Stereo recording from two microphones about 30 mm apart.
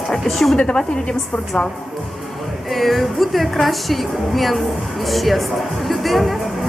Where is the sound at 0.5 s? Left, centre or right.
Left.